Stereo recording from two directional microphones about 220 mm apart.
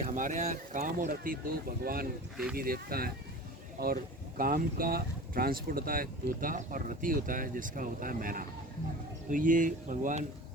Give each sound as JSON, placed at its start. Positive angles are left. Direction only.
{"t": 0.0, "sound": "speech", "side_deg": -35}